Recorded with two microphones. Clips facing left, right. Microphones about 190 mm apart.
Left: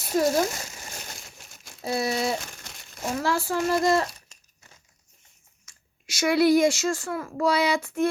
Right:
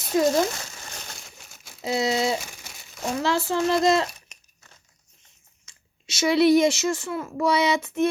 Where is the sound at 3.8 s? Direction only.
20° right (ahead or behind).